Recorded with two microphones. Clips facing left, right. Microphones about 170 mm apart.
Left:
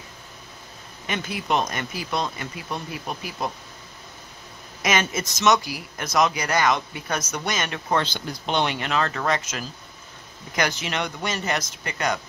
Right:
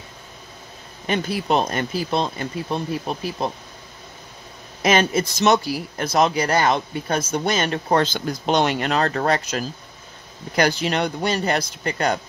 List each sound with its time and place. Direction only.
1.0 s speech: 35° right (ahead or behind)
4.8 s speech: 30° right (ahead or behind)